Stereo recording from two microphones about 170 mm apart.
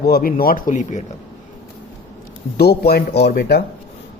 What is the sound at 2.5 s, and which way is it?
Speech, 70° left (ahead or behind).